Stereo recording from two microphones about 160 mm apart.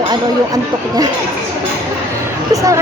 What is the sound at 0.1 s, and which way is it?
Speech, 25° right (ahead or behind).